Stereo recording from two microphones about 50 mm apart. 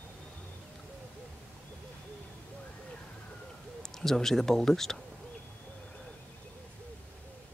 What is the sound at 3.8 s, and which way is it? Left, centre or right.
Speech, centre.